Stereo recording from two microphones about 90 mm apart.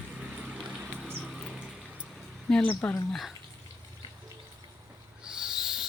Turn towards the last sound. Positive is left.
turn(degrees=-5)  # may be behind; listen again after turning